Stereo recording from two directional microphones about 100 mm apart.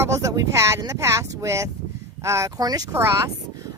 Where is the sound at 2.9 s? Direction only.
30° right (ahead or behind).